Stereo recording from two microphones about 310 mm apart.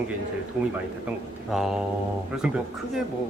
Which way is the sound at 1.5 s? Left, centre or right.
Centre.